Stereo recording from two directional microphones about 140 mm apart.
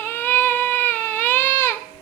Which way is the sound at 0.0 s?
15° left (ahead or behind).